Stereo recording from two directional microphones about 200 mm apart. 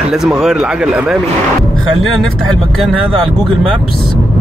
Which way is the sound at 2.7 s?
Centre (ahead or behind).